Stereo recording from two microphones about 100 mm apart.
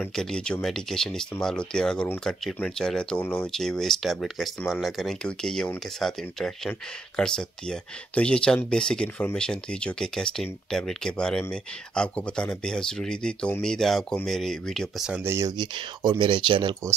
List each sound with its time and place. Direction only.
0.1 s speech: 5° left (ahead or behind)
15.2 s speech: 30° right (ahead or behind)
15.5 s speech: 50° right (ahead or behind)